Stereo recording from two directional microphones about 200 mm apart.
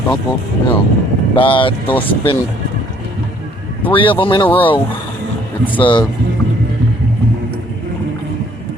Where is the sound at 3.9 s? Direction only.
25° left (ahead or behind).